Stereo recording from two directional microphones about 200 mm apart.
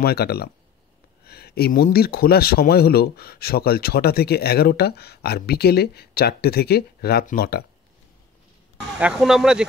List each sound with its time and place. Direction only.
0.0 s speech: 50° left (ahead or behind)
8.9 s speech: 5° right (ahead or behind)